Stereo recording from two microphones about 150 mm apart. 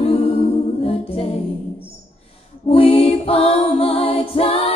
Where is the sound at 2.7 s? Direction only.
40° left (ahead or behind).